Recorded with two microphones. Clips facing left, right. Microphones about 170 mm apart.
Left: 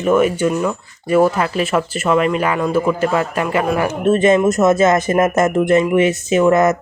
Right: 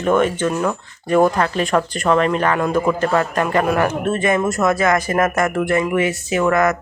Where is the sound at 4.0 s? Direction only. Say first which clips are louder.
Left 5 dB; 20° left (ahead or behind).